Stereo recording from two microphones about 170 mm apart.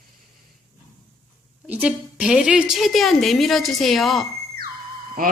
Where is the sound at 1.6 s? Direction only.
5° right (ahead or behind).